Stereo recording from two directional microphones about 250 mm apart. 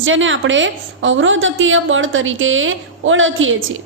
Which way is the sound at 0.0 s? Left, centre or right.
Right.